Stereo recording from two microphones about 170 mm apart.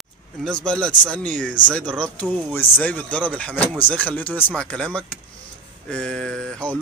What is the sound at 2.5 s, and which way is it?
Speech, 10° left (ahead or behind).